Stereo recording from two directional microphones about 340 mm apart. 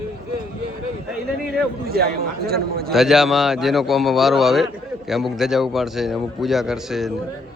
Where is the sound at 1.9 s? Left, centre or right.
Right.